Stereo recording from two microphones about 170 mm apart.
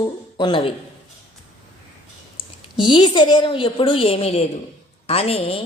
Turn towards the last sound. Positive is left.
turn(degrees=35)  # may be behind; listen again after turning